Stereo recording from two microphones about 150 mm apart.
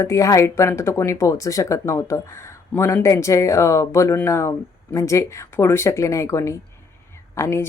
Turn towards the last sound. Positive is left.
turn(degrees=20)  # may be behind; listen again after turning